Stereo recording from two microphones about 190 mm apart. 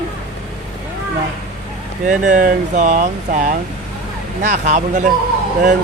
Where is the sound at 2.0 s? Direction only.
40° right (ahead or behind).